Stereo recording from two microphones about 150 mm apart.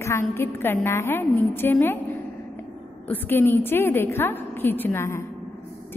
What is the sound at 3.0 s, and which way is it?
A woman's voice, 15° left (ahead or behind).